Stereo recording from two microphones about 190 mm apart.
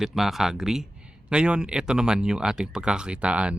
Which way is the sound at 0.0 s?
Centre (ahead or behind).